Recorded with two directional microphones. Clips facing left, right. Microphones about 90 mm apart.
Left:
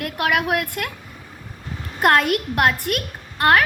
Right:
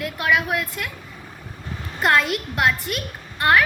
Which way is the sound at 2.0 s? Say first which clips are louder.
Left 3 dB; 55° left (ahead or behind).